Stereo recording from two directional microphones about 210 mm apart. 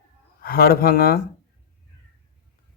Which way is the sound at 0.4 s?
45° left (ahead or behind).